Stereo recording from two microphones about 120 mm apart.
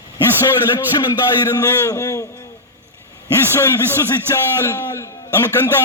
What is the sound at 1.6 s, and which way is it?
Speech, 25° left (ahead or behind).